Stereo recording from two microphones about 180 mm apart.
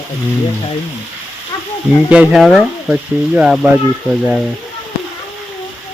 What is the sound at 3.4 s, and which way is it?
Speech, 5° right (ahead or behind).